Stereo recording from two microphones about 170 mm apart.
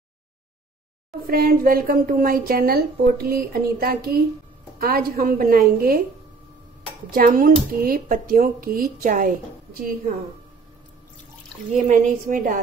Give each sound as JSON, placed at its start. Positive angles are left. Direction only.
{"t": 1.2, "sound": "speech", "side_deg": -60}
{"t": 7.1, "sound": "speech", "side_deg": -55}
{"t": 11.7, "sound": "a woman's voice", "side_deg": -50}